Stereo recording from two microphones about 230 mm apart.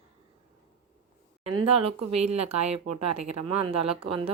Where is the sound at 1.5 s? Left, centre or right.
Right.